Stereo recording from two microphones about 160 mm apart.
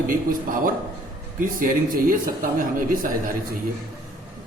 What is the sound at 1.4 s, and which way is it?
Speech, 60° right (ahead or behind).